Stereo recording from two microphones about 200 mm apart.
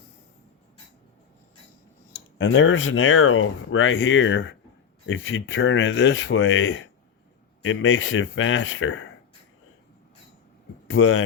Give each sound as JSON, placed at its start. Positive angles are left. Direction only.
{"t": 2.4, "sound": "speech", "side_deg": 75}
{"t": 10.8, "sound": "speech", "side_deg": 85}